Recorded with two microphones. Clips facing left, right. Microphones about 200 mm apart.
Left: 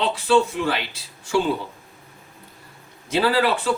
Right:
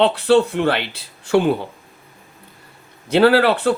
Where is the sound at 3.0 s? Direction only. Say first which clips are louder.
Right 6 dB; 60° right (ahead or behind).